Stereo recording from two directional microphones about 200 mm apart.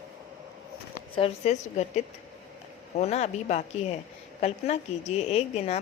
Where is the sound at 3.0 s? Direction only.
35° left (ahead or behind).